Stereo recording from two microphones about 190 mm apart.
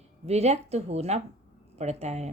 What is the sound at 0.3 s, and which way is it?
Speech, 35° right (ahead or behind).